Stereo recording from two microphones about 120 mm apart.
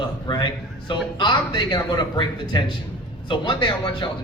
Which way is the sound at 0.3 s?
40° left (ahead or behind).